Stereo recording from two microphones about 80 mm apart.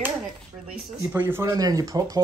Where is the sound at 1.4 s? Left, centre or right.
Right.